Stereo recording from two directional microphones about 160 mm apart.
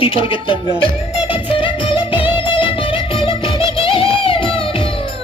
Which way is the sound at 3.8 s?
35° left (ahead or behind).